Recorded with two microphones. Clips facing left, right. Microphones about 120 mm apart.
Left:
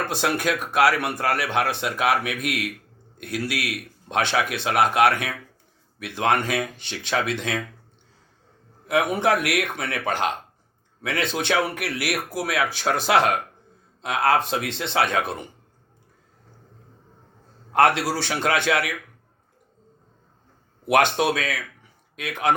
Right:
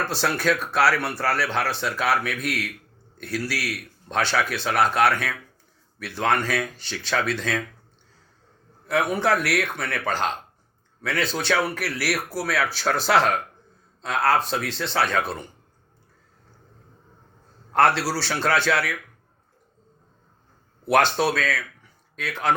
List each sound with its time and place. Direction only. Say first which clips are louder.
0.0 s a man's voice: even; 15° left (ahead or behind)
8.9 s a man's voice: left 1 dB; 20° left (ahead or behind)
17.8 s speech: left 1 dB; 20° left (ahead or behind)
21.2 s speech: even; 15° left (ahead or behind)